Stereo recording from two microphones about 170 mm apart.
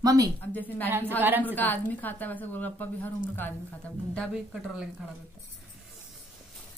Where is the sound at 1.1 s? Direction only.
10° right (ahead or behind).